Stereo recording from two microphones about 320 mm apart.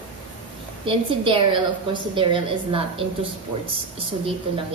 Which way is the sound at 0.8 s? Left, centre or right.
Centre.